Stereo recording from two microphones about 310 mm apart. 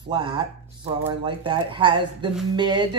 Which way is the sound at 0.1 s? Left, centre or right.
Centre.